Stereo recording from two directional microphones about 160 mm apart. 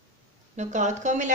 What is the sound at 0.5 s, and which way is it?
Speech, 45° right (ahead or behind).